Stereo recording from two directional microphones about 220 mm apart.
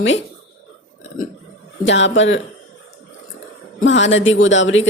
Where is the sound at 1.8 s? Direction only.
55° left (ahead or behind).